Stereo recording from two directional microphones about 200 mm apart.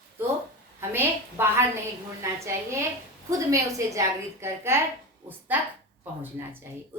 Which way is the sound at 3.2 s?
15° right (ahead or behind).